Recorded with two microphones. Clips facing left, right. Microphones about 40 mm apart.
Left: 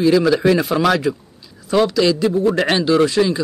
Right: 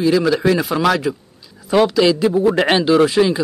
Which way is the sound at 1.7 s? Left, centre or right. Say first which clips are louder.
Right 2 dB; centre.